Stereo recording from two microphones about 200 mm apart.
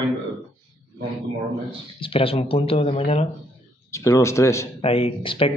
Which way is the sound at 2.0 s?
25° left (ahead or behind).